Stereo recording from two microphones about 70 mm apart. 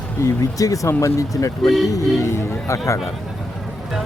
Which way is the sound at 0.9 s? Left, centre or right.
Left.